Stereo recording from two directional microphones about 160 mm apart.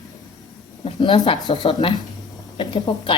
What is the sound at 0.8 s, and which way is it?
Speech, 35° left (ahead or behind).